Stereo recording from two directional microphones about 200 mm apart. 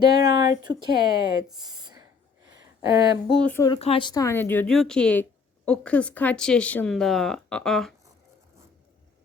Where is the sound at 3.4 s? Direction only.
10° left (ahead or behind).